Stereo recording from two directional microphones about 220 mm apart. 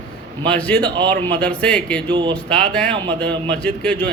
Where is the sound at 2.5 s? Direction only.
5° left (ahead or behind).